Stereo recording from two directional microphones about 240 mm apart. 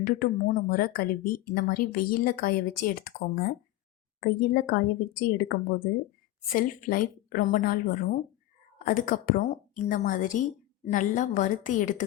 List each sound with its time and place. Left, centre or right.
0.0 s speech: left